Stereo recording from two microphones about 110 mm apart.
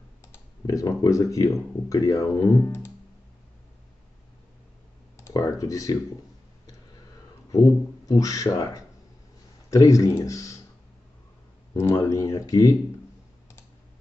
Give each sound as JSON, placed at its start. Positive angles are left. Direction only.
{"t": 0.2, "sound": "speech", "side_deg": 30}
{"t": 5.1, "sound": "speech", "side_deg": 30}
{"t": 8.1, "sound": "speech", "side_deg": 30}
{"t": 11.7, "sound": "speech", "side_deg": 25}